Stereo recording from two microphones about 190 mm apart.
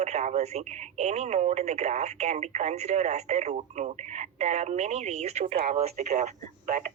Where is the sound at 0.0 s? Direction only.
35° right (ahead or behind).